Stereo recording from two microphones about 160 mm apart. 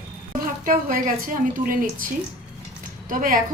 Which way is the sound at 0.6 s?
60° right (ahead or behind).